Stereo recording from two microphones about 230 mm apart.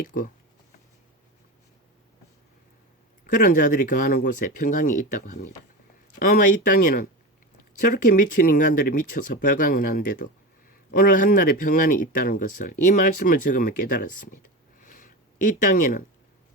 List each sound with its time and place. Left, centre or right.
0.0 s speech: left
3.2 s speech: left
14.8 s a sound: left